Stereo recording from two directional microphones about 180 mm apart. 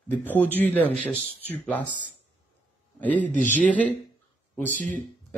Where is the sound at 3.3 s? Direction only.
45° left (ahead or behind).